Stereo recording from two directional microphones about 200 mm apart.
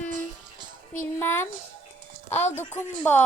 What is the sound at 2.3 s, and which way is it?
Speech, 35° left (ahead or behind).